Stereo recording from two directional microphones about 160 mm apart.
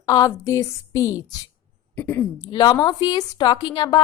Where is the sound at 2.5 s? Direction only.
25° left (ahead or behind).